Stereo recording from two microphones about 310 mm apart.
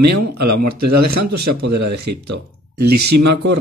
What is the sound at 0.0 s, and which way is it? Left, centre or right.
Speech, right.